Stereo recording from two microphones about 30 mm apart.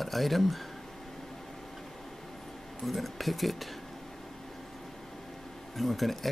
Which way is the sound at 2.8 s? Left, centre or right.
Centre.